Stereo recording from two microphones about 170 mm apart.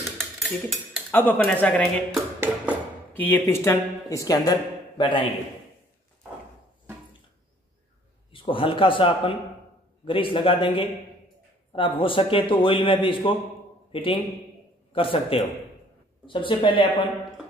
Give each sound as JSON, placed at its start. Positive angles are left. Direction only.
{"t": 0.0, "sound": "dishes", "side_deg": 0}
{"t": 1.4, "sound": "speech", "side_deg": 10}
{"t": 2.1, "sound": "a sound", "side_deg": -15}
{"t": 3.1, "sound": "speech", "side_deg": 10}
{"t": 8.3, "sound": "a man's voice", "side_deg": 30}